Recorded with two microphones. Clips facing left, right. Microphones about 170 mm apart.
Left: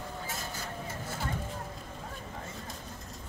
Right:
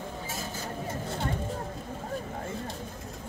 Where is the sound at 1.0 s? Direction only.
25° right (ahead or behind).